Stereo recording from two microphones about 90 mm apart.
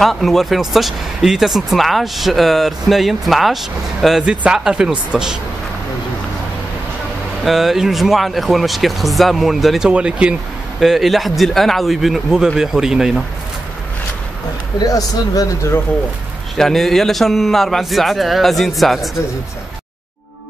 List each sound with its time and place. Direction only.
0.0 s speech: centre (ahead or behind)
4.2 s speech: 10° right (ahead or behind)
7.4 s speech: 5° right (ahead or behind)
10.8 s speech: centre (ahead or behind)
14.8 s speech: 40° left (ahead or behind)
16.5 s speech: 5° left (ahead or behind)